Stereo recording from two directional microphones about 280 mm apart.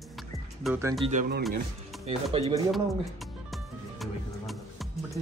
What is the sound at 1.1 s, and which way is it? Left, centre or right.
Speech, right.